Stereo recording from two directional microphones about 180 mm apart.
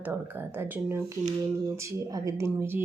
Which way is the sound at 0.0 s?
10° right (ahead or behind).